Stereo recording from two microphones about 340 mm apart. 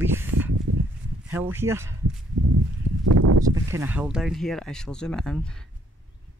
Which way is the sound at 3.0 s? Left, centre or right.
Right.